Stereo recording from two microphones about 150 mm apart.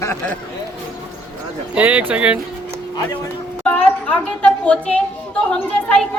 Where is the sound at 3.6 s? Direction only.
10° left (ahead or behind).